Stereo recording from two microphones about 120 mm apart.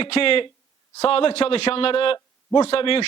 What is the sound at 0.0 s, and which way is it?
A man's voice, 50° left (ahead or behind).